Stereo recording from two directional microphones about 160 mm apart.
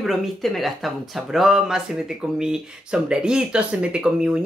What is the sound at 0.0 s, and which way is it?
Speech, centre (ahead or behind).